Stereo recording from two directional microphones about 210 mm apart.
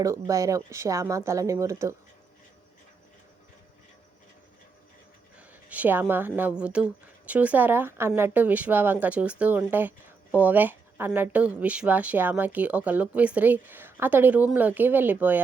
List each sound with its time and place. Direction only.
0.0 s speech: 15° right (ahead or behind)
5.6 s speech: 5° right (ahead or behind)